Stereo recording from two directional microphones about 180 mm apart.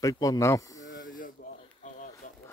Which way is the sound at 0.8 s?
50° left (ahead or behind).